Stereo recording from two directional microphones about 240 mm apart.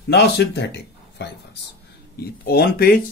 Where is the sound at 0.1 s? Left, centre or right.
Left.